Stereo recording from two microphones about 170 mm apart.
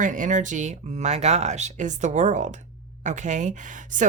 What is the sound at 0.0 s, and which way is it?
A woman's voice, 50° right (ahead or behind).